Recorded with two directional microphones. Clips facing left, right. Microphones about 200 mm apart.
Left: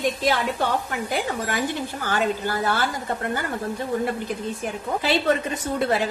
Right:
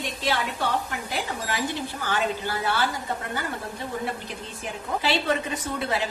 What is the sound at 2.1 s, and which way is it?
Speech, 45° left (ahead or behind).